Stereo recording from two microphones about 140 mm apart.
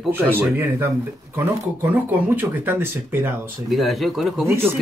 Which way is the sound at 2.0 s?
10° right (ahead or behind).